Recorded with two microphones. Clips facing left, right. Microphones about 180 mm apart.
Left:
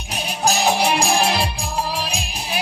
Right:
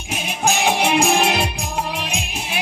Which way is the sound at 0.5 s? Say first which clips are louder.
Even; 35° left (ahead or behind).